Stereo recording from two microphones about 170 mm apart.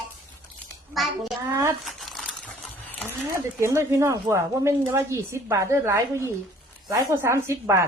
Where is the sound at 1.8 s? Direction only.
Centre (ahead or behind).